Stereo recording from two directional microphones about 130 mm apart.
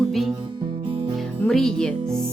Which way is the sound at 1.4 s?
5° left (ahead or behind).